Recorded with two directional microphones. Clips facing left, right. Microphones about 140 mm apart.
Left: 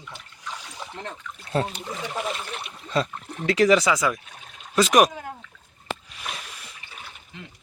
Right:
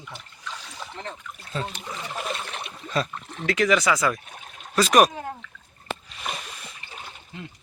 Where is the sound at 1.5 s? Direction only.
65° left (ahead or behind).